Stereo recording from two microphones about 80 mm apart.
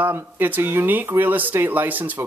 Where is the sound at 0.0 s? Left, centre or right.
Right.